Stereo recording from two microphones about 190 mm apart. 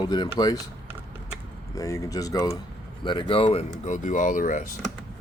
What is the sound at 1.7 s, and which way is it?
Speech, 15° left (ahead or behind).